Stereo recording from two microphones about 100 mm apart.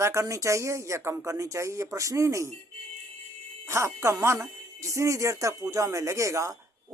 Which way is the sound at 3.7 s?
30° right (ahead or behind).